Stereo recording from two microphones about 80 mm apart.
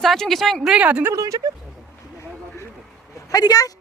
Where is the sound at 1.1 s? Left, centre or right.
Right.